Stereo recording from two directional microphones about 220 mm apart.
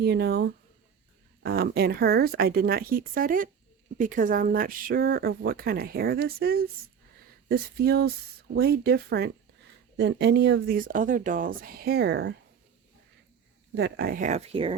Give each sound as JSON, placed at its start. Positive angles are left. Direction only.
{"t": 0.0, "sound": "speech", "side_deg": -45}
{"t": 13.7, "sound": "speech", "side_deg": -50}